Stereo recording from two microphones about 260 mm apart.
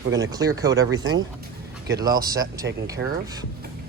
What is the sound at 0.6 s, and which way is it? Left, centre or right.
Speech, centre.